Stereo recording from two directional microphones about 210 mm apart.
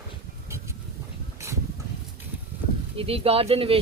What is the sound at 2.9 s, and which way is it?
Speech, 25° right (ahead or behind).